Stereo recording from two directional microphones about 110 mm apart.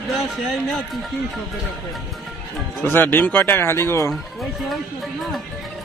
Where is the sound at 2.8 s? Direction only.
20° left (ahead or behind).